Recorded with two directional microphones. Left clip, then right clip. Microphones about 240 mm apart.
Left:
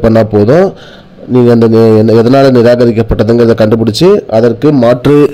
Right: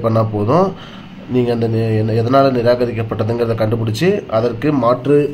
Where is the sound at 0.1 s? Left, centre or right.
Left.